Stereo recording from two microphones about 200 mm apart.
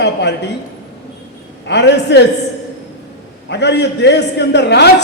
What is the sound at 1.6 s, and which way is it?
Speech, 60° left (ahead or behind).